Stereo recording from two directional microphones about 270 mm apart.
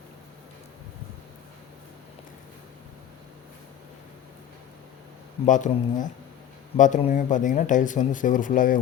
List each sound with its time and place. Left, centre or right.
5.5 s speech: left